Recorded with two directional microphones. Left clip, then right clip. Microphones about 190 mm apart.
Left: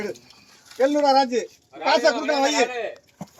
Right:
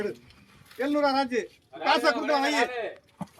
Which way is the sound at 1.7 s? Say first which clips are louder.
Left 4 dB; 20° right (ahead or behind).